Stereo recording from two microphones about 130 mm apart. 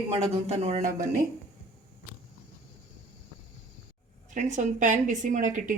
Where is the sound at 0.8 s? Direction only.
80° right.